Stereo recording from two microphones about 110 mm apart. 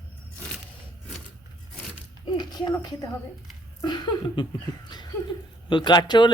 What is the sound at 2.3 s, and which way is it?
A woman's voice, 40° left (ahead or behind).